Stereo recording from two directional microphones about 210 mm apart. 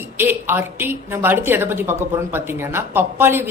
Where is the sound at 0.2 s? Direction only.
10° right (ahead or behind).